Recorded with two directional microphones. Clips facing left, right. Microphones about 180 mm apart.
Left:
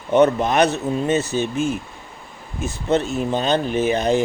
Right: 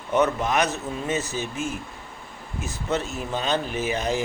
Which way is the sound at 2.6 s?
30° left (ahead or behind).